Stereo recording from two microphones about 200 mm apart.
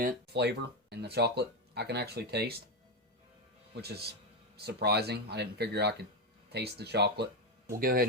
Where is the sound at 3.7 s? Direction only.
55° right (ahead or behind).